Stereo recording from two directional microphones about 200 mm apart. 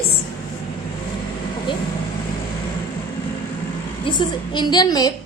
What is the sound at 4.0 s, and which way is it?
A woman's voice, 20° left (ahead or behind).